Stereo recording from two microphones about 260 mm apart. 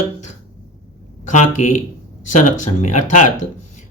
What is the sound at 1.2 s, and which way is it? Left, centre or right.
Speech, left.